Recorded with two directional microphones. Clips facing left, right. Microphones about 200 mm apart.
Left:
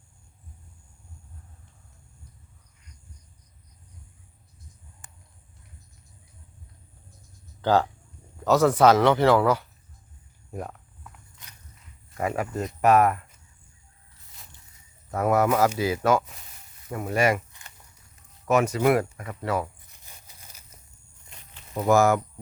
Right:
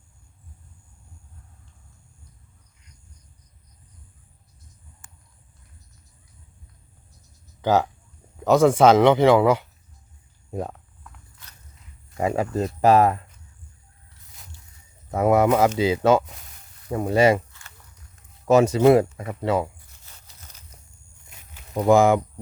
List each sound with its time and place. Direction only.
5.0 s horse: 20° left (ahead or behind)
7.6 s speech: 20° right (ahead or behind)
12.1 s speech: 20° right (ahead or behind)
15.1 s speech: 20° right (ahead or behind)
18.4 s speech: 30° right (ahead or behind)
20.1 s tearing: 10° left (ahead or behind)
21.2 s a sound: 10° right (ahead or behind)